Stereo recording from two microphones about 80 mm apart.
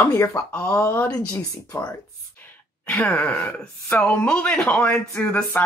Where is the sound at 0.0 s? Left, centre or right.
Left.